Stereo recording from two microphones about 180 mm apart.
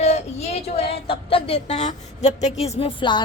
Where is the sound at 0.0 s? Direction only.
35° left (ahead or behind).